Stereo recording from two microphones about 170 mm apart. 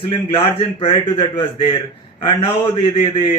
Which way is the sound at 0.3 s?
30° left (ahead or behind).